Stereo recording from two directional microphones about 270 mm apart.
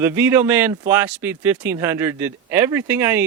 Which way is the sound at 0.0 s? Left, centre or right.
Centre.